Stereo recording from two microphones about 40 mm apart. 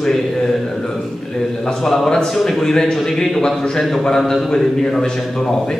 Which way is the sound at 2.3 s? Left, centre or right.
Centre.